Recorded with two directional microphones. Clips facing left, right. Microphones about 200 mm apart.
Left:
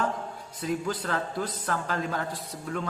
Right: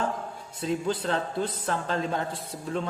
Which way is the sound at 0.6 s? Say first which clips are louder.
Right 2 dB; 25° right (ahead or behind).